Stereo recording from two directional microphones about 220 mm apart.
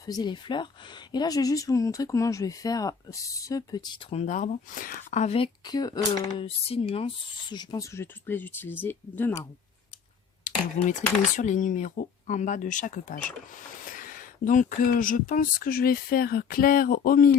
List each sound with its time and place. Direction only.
0.0 s speech: 15° left (ahead or behind)
10.4 s speech: 35° left (ahead or behind)